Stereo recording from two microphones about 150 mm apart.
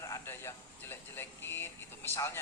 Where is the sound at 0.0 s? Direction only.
20° left (ahead or behind).